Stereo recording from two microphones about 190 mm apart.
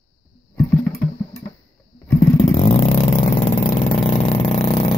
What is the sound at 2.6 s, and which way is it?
Vehicle, 30° left (ahead or behind).